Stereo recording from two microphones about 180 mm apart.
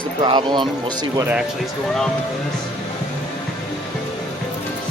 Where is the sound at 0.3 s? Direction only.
25° right (ahead or behind).